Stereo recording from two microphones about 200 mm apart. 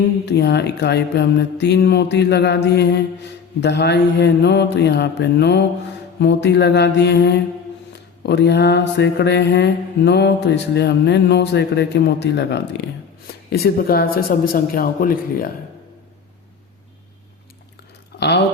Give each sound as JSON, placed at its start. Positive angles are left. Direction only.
{"t": 0.3, "sound": "mantra", "side_deg": 55}
{"t": 13.2, "sound": "speech", "side_deg": 50}
{"t": 18.2, "sound": "speech", "side_deg": 55}